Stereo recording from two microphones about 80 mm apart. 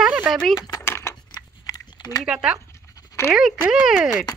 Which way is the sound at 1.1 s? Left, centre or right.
Left.